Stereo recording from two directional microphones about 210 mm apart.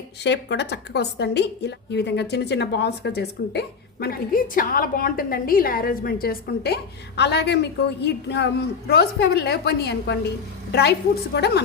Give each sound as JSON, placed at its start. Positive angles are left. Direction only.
{"t": 0.2, "sound": "a woman's voice", "side_deg": 55}